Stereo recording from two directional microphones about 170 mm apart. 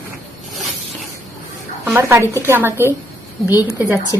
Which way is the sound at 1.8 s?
10° right (ahead or behind).